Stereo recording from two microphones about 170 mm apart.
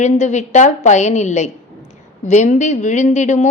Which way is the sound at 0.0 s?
45° left (ahead or behind).